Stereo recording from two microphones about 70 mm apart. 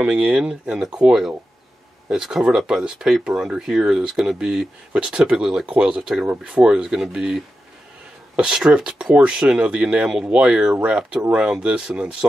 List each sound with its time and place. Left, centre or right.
0.0 s speech: centre
2.0 s speech: centre
5.7 s speech: centre
5.9 s speech: centre
6.2 s speech: right
6.6 s speech: centre